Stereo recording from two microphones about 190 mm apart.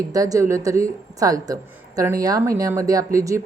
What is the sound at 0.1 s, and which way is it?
A woman's voice, 20° right (ahead or behind).